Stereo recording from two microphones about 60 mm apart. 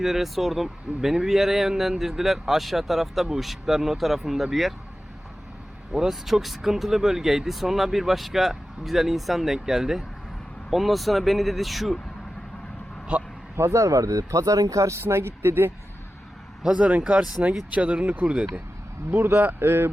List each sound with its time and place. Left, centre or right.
0.0 s speech: centre
5.9 s speech: centre
13.6 s speech: right
15.0 s speech: right
16.6 s speech: centre
19.1 s a man's voice: right